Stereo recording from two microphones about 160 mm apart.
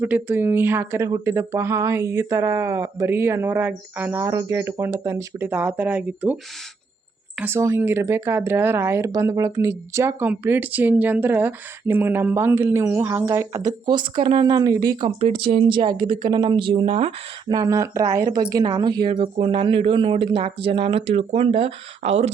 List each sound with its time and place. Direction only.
0.0 s speech: 10° right (ahead or behind); by 17.6 s 35° right (ahead or behind)
17.6 s speech: 20° right (ahead or behind); by 22.3 s 40° right (ahead or behind)